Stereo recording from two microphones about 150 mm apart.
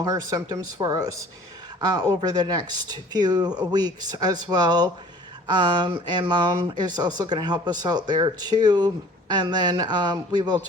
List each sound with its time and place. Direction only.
0.0 s speech: 25° right (ahead or behind)